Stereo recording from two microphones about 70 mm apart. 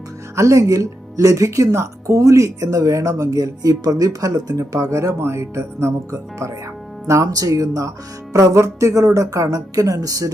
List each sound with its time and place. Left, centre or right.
0.3 s speech: right
7.1 s speech: right